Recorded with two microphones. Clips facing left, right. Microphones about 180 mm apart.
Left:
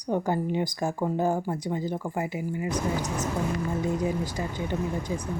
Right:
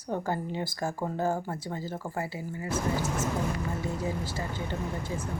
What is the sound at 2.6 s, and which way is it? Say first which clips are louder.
Speech: right 1 dB; 15° left (ahead or behind).